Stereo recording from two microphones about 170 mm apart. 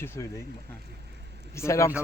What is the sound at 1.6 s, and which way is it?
Speech, 15° left (ahead or behind).